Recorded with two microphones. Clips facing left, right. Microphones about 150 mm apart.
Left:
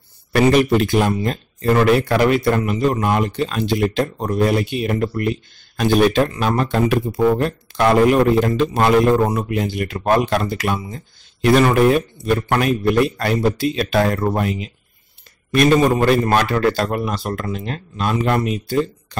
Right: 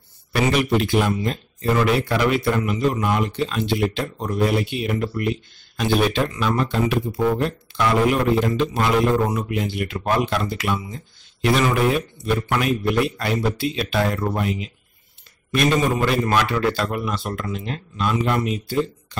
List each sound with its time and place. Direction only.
0.3 s speech: 50° left (ahead or behind)